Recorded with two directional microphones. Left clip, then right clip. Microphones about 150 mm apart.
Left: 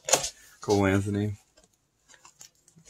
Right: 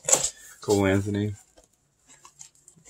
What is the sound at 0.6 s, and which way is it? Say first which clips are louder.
Speech: right 2 dB; 20° left (ahead or behind).